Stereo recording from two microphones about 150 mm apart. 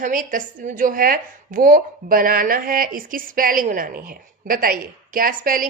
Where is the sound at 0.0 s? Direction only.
65° right (ahead or behind).